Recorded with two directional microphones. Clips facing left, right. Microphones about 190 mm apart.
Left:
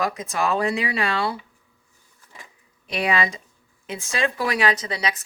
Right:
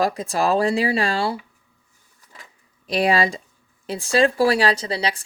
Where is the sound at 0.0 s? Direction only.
35° right (ahead or behind).